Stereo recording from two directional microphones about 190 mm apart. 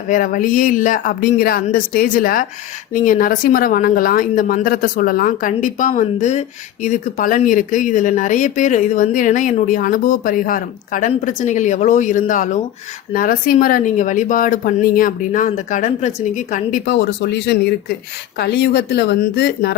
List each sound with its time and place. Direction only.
0.1 s speech: 45° left (ahead or behind); by 19.7 s 60° left (ahead or behind)